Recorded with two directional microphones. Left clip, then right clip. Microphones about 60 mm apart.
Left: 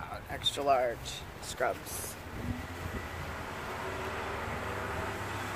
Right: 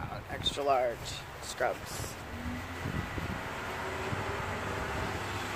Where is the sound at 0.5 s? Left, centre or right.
Left.